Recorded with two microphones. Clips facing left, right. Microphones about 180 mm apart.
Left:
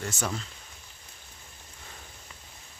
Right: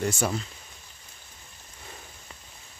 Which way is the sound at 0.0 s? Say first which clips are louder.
Right 6 dB; 15° right (ahead or behind).